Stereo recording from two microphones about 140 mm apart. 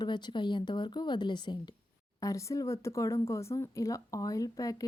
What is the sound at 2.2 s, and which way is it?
Speech, 25° left (ahead or behind).